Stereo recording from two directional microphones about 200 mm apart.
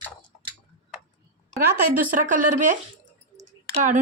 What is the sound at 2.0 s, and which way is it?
Speech, 40° right (ahead or behind).